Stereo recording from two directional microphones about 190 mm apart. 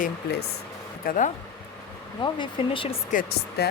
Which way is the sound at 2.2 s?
25° left (ahead or behind).